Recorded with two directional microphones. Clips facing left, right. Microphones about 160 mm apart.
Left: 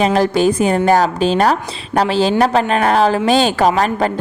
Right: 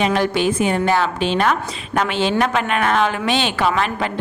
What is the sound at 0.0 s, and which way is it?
A woman's voice, 35° left (ahead or behind).